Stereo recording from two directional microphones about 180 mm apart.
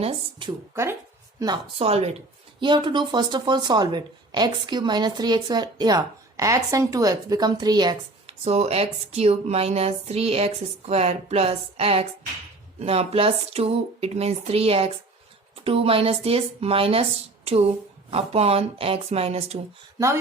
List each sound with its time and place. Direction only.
0.0 s speech: 25° right (ahead or behind)
0.7 s speech: 15° right (ahead or behind)
1.8 s speech: 35° right (ahead or behind)
8.4 s speech: 35° right (ahead or behind)